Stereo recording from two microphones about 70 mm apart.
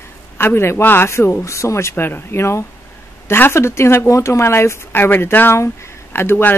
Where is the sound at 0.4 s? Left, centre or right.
Left.